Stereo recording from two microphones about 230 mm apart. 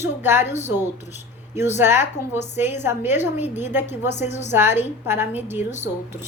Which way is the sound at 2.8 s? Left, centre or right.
Centre.